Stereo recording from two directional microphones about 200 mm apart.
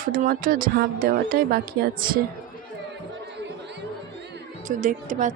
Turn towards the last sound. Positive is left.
turn(degrees=-40)  # may be behind; listen again after turning